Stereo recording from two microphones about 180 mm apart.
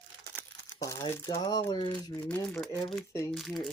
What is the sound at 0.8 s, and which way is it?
Speech, 20° left (ahead or behind).